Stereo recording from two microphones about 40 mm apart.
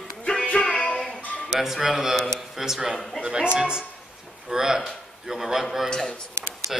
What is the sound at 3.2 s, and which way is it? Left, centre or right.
Speech, right.